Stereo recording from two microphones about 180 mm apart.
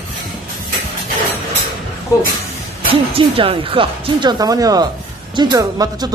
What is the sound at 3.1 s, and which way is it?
Speech, 30° right (ahead or behind).